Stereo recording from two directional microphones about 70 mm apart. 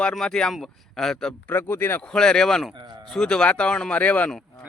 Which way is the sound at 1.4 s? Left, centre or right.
Left.